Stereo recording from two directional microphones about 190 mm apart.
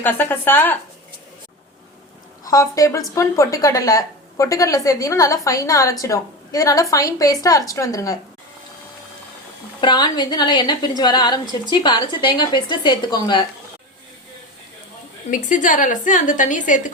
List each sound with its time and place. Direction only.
0.0 s a woman's voice: 10° left (ahead or behind)
2.4 s a woman's voice: 15° left (ahead or behind)
9.8 s speech: 25° left (ahead or behind)
15.3 s a woman's voice: 40° left (ahead or behind)